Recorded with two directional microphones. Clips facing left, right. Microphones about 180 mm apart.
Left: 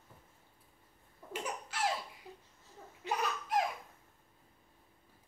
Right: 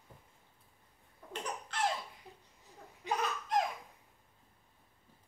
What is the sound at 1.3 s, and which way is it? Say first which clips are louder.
Laughter: even; 5° left (ahead or behind).